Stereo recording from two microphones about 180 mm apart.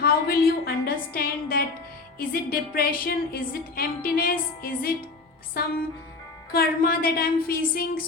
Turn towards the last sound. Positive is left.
turn(degrees=55)  # may be behind; listen again after turning